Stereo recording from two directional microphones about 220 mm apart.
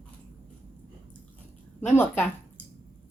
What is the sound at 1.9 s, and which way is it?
Speech, 10° left (ahead or behind).